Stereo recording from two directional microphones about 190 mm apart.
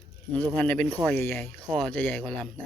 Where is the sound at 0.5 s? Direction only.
10° left (ahead or behind).